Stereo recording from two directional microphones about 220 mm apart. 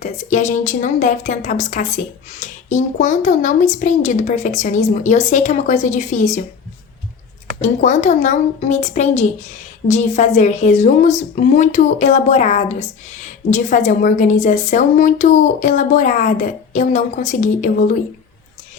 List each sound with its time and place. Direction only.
0.0 s a woman's voice: 35° left (ahead or behind)
7.6 s a woman's voice: 35° left (ahead or behind)